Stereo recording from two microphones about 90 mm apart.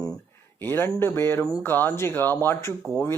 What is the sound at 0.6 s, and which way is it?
Speech, 25° left (ahead or behind).